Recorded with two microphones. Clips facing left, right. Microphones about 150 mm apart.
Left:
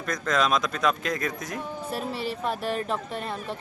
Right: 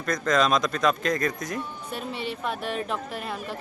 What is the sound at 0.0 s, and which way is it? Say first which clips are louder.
Speech: right 2 dB; 5° left (ahead or behind).